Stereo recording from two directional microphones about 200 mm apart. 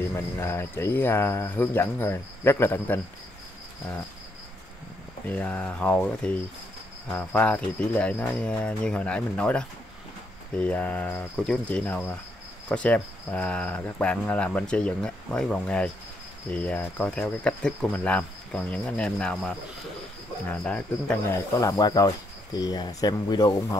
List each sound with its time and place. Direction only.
0.1 s speech: 10° left (ahead or behind)
5.2 s speech: 10° left (ahead or behind)
7.1 s cricket: 10° left (ahead or behind)
12.6 s speech: 5° left (ahead or behind)
16.4 s cricket: 5° left (ahead or behind)
20.4 s speech: 5° left (ahead or behind)